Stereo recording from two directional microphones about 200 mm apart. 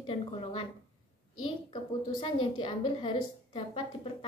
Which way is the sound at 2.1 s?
25° left (ahead or behind).